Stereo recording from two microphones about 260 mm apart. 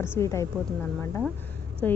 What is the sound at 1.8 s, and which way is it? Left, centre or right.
Speech, centre.